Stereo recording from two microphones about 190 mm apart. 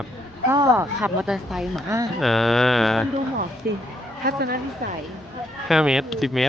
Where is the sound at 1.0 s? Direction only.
Centre (ahead or behind).